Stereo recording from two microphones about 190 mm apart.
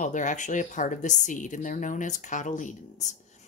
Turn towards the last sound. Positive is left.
turn(degrees=40)  # may be behind; listen again after turning